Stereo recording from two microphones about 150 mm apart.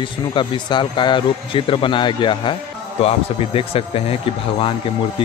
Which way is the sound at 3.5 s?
40° left (ahead or behind).